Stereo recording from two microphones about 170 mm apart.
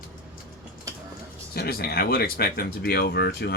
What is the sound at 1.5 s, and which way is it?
Speech, 65° left (ahead or behind).